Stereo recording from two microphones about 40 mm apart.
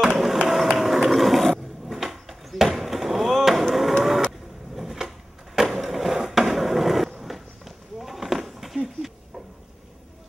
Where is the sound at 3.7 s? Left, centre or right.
Centre.